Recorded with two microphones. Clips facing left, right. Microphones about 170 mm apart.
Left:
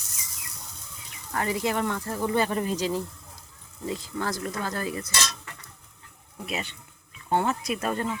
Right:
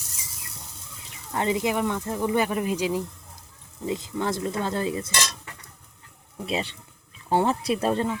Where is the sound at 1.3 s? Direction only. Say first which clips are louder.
Right 2 dB; 20° right (ahead or behind).